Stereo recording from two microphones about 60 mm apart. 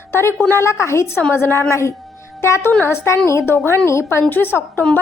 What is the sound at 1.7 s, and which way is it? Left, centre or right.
Speech, left.